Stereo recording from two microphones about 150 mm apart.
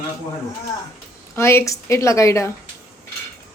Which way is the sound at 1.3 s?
15° left (ahead or behind).